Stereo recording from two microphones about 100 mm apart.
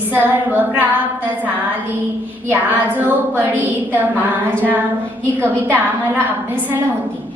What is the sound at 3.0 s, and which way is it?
Speech, 20° right (ahead or behind).